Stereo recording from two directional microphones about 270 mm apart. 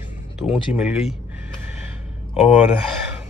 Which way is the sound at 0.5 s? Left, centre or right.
Centre.